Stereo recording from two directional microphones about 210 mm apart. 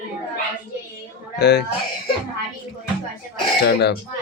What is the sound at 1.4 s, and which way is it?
Speech, 55° left (ahead or behind).